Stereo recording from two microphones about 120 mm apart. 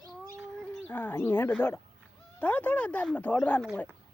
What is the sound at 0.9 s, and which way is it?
Speech, 15° left (ahead or behind).